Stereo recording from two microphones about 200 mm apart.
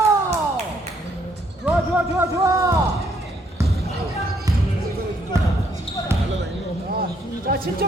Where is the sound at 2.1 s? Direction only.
15° right (ahead or behind).